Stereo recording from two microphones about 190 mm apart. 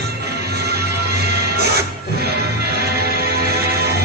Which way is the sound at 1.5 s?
55° right (ahead or behind).